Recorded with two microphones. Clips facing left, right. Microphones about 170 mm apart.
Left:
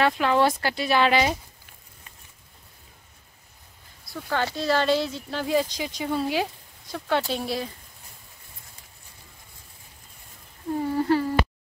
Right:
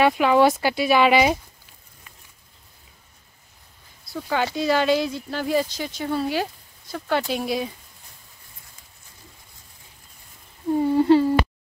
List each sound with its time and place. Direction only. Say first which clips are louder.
0.0 s speech: right 4 dB; 10° right (ahead or behind)
4.3 s speech: right 3 dB; 10° right (ahead or behind)
10.8 s humming: right 6 dB; 20° right (ahead or behind)